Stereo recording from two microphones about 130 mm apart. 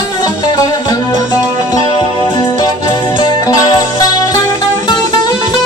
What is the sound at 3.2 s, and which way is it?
Music, 30° left (ahead or behind).